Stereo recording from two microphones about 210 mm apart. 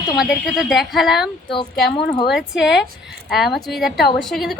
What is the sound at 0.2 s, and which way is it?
A woman's voice, centre (ahead or behind).